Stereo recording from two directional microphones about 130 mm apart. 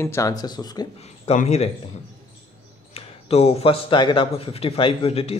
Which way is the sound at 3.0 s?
50° left (ahead or behind).